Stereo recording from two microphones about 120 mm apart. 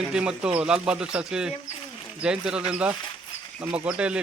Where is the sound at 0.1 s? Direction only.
10° right (ahead or behind).